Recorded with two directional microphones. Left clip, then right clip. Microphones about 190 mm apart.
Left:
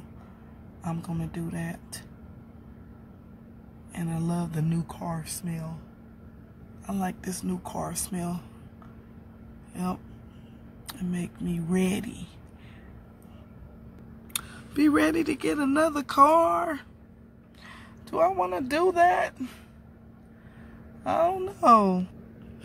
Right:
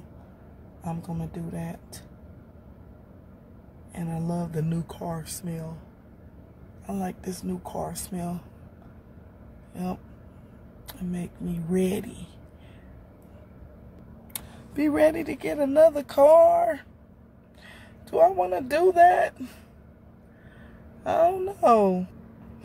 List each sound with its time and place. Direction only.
1.2 s speech: 15° right (ahead or behind)
3.9 s speech: 10° right (ahead or behind)
6.9 s speech: 10° right (ahead or behind)
10.9 s speech: 15° right (ahead or behind)
14.3 s speech: 5° right (ahead or behind)
21.0 s speech: 20° right (ahead or behind)